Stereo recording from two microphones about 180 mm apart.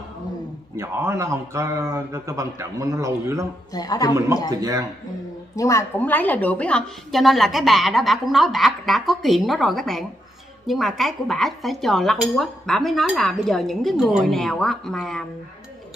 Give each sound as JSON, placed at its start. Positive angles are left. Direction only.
{"t": 0.7, "sound": "a man's voice", "side_deg": -15}
{"t": 3.7, "sound": "a man's voice", "side_deg": 20}
{"t": 4.5, "sound": "speech", "side_deg": -20}
{"t": 5.6, "sound": "a woman's voice", "side_deg": 15}